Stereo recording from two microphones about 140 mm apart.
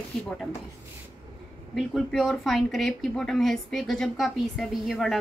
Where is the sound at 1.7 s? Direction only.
Centre (ahead or behind).